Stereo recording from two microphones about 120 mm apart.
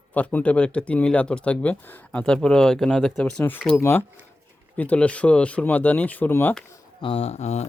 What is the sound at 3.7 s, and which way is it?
Speech, 20° left (ahead or behind).